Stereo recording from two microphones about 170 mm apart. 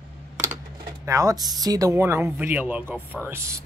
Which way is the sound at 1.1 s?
20° right (ahead or behind).